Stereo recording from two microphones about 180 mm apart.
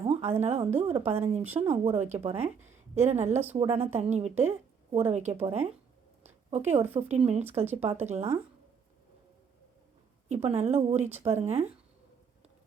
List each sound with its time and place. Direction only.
0.0 s a sound: 35° right (ahead or behind)
0.4 s a woman's voice: 35° right (ahead or behind)
10.2 s a woman's voice: 35° right (ahead or behind)